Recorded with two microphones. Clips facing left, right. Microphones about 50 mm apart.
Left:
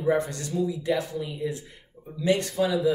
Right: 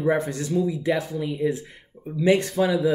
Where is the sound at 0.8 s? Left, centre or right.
Right.